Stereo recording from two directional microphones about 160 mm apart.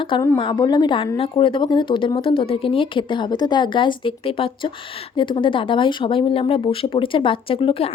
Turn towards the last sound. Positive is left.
turn(degrees=35)  # may be behind; listen again after turning